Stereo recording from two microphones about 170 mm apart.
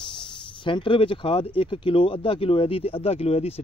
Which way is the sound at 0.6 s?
30° left (ahead or behind).